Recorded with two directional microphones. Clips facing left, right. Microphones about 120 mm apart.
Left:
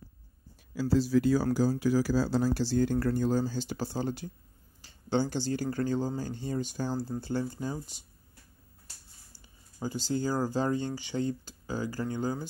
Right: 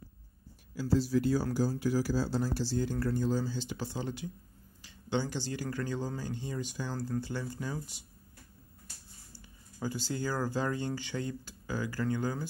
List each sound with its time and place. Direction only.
0.8 s speech: 90° left; by 7.4 s 30° left (ahead or behind)
7.5 s speech: 20° left (ahead or behind)
9.8 s speech: 25° left (ahead or behind)